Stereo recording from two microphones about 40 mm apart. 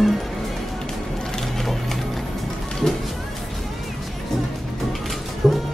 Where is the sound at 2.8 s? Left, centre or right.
Centre.